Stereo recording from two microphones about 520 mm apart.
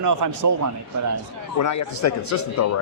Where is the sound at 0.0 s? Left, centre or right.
Right.